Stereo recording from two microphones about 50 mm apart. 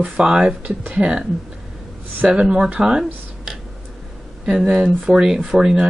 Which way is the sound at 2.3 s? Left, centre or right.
Centre.